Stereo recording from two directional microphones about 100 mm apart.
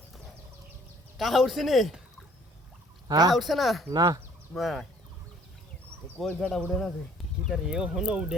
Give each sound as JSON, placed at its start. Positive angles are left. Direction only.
{"t": 1.2, "sound": "speech", "side_deg": 0}
{"t": 3.1, "sound": "speech", "side_deg": -40}
{"t": 3.3, "sound": "speech", "side_deg": 0}
{"t": 3.8, "sound": "speech", "side_deg": -40}
{"t": 4.5, "sound": "speech", "side_deg": 0}
{"t": 6.2, "sound": "speech", "side_deg": 0}